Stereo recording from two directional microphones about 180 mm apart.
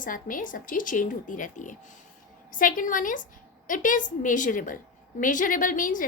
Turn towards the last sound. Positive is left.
turn(degrees=45)  # may be behind; listen again after turning